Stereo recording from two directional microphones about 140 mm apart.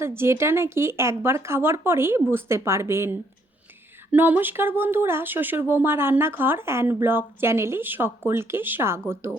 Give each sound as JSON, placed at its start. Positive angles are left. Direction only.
{"t": 0.0, "sound": "speech", "side_deg": -15}